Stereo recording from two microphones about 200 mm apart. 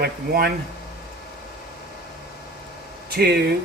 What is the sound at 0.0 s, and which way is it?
Speech, 50° right (ahead or behind).